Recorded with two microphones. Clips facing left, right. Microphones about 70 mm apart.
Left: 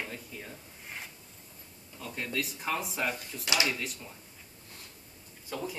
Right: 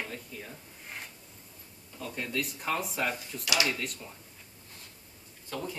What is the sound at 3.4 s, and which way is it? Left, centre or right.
Speech, left.